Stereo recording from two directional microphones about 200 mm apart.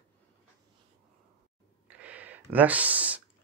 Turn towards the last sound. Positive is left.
turn(degrees=-10)  # may be behind; listen again after turning